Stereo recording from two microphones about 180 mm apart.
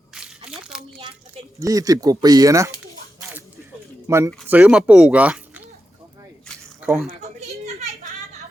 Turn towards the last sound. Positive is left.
turn(degrees=-5)  # may be behind; listen again after turning